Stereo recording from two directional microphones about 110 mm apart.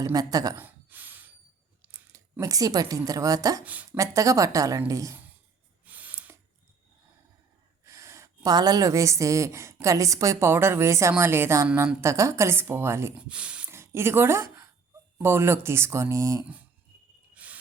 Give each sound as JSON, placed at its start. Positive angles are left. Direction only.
{"t": 0.0, "sound": "a woman's voice", "side_deg": -35}
{"t": 0.6, "sound": "a sound", "side_deg": -15}
{"t": 1.8, "sound": "chewing", "side_deg": -15}
{"t": 2.4, "sound": "a woman's voice", "side_deg": -35}
{"t": 3.6, "sound": "speech", "side_deg": -15}
{"t": 3.9, "sound": "a woman's voice", "side_deg": -30}
{"t": 5.8, "sound": "a sound", "side_deg": -15}
{"t": 7.9, "sound": "gasp", "side_deg": -25}
{"t": 8.5, "sound": "a woman's voice", "side_deg": -35}
{"t": 13.1, "sound": "speech", "side_deg": -10}
{"t": 13.7, "sound": "a sound", "side_deg": -25}
{"t": 15.2, "sound": "a woman's voice", "side_deg": -20}
{"t": 17.3, "sound": "a sound", "side_deg": -15}